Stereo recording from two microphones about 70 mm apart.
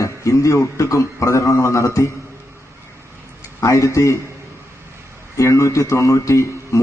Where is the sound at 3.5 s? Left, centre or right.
Left.